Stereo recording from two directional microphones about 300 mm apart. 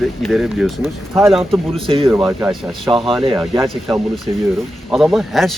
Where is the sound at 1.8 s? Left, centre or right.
Centre.